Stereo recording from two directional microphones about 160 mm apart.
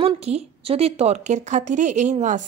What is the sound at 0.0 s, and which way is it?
A woman's voice, 40° right (ahead or behind).